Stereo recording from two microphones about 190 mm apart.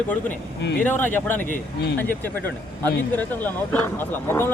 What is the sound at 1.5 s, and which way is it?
Speech, 55° left (ahead or behind).